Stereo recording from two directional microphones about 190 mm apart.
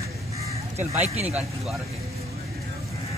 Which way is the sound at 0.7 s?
35° right (ahead or behind).